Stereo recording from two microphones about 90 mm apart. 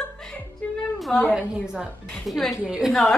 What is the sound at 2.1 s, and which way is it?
A woman's voice, 5° left (ahead or behind).